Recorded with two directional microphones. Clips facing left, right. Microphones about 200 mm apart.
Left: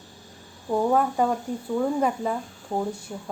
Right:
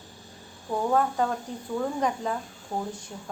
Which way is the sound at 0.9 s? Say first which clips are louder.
Left 1 dB; 10° left (ahead or behind).